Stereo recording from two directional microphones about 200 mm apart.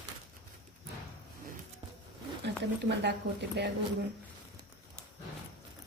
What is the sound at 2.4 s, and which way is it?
Speech, 60° right (ahead or behind).